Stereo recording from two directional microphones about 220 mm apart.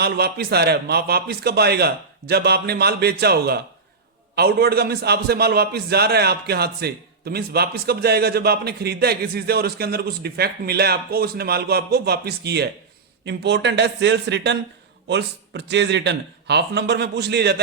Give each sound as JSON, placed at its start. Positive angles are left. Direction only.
{"t": 0.0, "sound": "a man's voice", "side_deg": -45}